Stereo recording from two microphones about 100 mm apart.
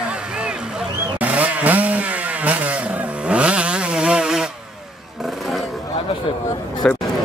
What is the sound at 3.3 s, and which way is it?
Chainsaw, 10° right (ahead or behind).